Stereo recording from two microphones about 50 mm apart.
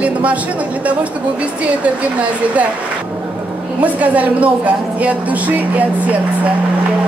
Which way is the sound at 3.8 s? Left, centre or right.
Right.